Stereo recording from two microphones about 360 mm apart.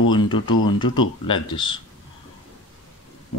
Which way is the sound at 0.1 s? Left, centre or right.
Centre.